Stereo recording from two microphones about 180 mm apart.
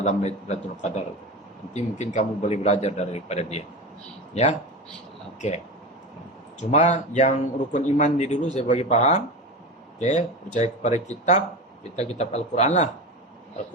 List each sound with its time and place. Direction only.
0.0 s speech: 40° left (ahead or behind)
6.6 s speech: 40° left (ahead or behind)